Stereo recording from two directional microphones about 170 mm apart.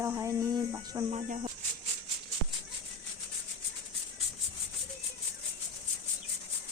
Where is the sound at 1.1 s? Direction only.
40° right (ahead or behind).